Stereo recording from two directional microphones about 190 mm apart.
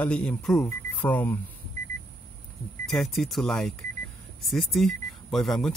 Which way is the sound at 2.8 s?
Centre (ahead or behind).